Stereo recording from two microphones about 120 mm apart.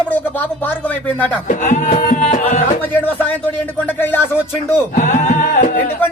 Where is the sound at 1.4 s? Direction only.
90° left.